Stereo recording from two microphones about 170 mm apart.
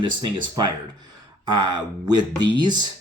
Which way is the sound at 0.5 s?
25° right (ahead or behind).